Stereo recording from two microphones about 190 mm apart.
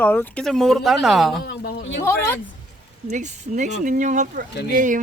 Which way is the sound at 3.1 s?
40° right (ahead or behind).